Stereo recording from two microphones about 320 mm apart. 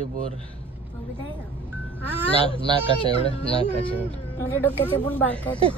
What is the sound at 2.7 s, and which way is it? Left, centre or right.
Speech, centre.